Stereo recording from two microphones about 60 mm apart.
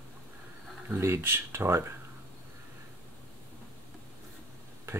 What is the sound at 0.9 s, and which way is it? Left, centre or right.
Speech, right.